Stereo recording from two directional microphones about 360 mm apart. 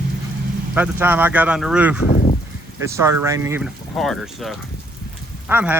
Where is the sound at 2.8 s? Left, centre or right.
Centre.